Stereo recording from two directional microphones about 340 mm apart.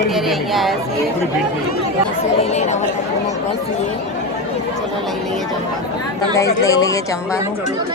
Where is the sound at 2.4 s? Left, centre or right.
Centre.